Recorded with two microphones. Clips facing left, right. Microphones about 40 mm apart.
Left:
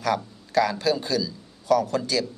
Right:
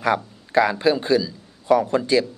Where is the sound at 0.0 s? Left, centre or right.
Right.